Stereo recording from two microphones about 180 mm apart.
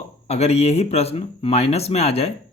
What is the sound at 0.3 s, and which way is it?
Speech, 35° left (ahead or behind).